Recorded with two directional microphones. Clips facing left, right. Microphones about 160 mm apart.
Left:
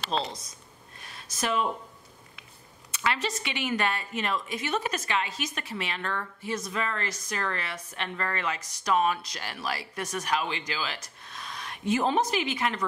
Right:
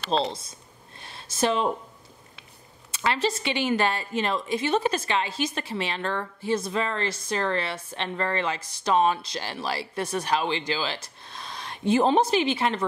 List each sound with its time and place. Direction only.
0.1 s speech: 30° right (ahead or behind)
0.9 s a sound: 30° right (ahead or behind)
2.9 s speech: 30° right (ahead or behind)